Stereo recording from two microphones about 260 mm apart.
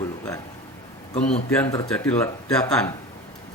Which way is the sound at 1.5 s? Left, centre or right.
Centre.